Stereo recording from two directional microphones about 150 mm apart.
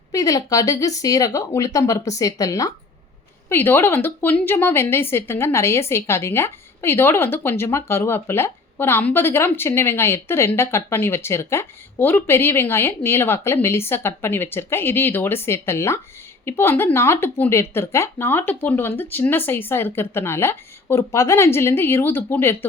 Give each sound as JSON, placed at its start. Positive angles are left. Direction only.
{"t": 0.1, "sound": "a woman's voice", "side_deg": 20}